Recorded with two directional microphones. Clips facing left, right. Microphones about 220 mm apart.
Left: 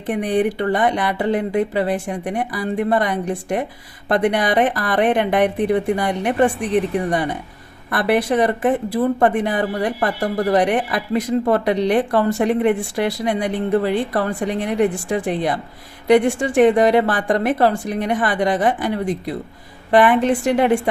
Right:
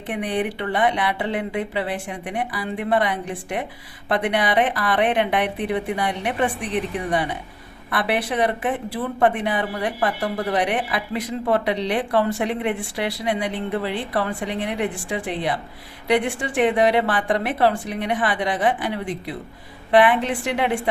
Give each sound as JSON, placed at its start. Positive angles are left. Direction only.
{"t": 0.1, "sound": "speech", "side_deg": 45}